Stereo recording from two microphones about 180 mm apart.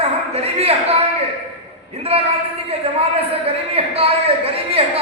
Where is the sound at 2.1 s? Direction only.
35° right (ahead or behind).